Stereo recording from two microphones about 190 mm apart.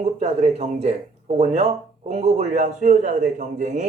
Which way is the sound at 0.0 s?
35° right (ahead or behind).